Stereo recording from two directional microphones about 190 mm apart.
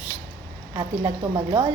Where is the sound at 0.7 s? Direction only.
25° right (ahead or behind).